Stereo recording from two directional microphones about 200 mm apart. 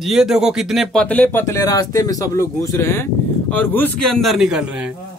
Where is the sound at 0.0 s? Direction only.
Centre (ahead or behind).